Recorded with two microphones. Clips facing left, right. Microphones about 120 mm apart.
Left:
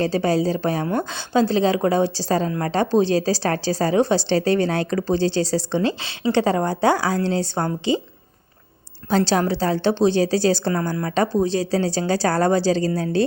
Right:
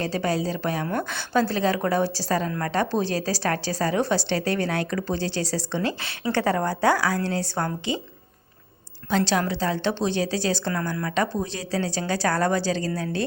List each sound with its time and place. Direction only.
0.0 s a woman's voice: 30° left (ahead or behind)
9.0 s a woman's voice: 35° left (ahead or behind)